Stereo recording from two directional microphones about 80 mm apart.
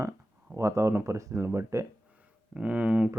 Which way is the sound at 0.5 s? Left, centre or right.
Right.